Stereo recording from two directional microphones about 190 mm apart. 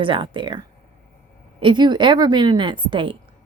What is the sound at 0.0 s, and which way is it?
Speech, 25° right (ahead or behind).